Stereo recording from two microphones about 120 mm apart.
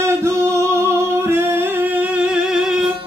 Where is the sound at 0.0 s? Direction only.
20° right (ahead or behind); by 2.7 s 5° right (ahead or behind).